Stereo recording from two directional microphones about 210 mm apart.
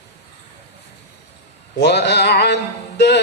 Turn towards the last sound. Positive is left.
turn(degrees=55)  # may be behind; listen again after turning